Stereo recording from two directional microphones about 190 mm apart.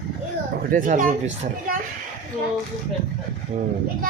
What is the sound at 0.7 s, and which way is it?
Speech, 45° right (ahead or behind).